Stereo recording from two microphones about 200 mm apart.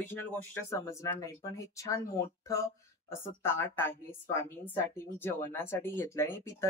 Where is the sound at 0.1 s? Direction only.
10° left (ahead or behind).